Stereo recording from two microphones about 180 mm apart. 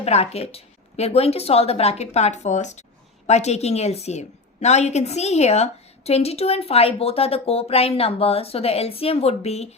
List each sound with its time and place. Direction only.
0.0 s a woman's voice: 35° left (ahead or behind)